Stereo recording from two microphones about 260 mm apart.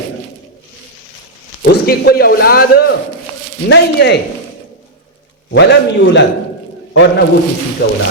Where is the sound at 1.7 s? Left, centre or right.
Left.